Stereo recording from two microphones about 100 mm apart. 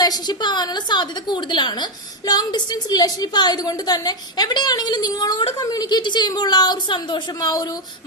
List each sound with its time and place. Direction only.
0.0 s a woman's voice: 45° left (ahead or behind)